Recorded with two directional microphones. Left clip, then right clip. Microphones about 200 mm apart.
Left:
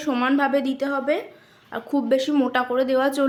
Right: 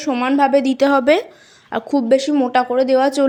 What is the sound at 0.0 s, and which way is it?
A woman's voice, 15° right (ahead or behind).